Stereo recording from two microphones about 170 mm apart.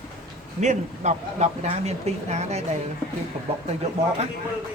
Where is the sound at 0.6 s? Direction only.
45° right (ahead or behind).